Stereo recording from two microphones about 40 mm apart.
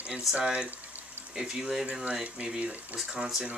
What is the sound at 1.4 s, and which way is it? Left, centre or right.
Speech, centre.